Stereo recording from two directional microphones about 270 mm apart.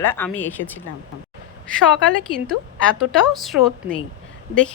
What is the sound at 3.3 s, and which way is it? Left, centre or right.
Speech, centre.